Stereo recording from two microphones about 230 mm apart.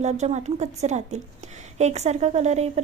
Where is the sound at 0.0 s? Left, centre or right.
Right.